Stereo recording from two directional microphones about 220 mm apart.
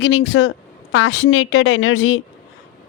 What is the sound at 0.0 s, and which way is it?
Speech, 55° left (ahead or behind).